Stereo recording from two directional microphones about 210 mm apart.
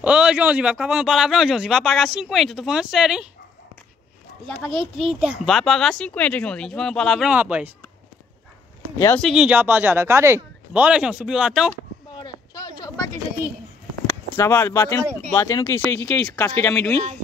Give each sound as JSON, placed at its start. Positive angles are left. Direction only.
{"t": 0.0, "sound": "speech", "side_deg": -5}
{"t": 4.5, "sound": "speech", "side_deg": 0}
{"t": 8.9, "sound": "speech", "side_deg": 15}
{"t": 9.2, "sound": "speech", "side_deg": -5}
{"t": 12.1, "sound": "a sound", "side_deg": 20}
{"t": 14.3, "sound": "speech", "side_deg": 10}